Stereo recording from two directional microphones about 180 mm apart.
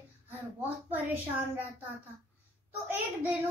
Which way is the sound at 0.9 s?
10° right (ahead or behind).